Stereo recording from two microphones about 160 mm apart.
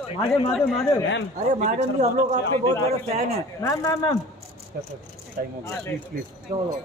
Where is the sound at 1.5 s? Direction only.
45° right (ahead or behind).